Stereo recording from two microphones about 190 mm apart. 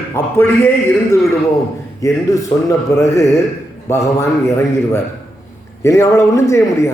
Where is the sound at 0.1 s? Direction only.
10° left (ahead or behind).